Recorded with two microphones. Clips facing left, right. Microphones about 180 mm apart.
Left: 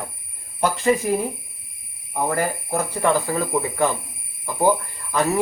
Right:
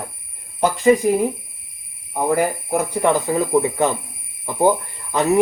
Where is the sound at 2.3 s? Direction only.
15° right (ahead or behind).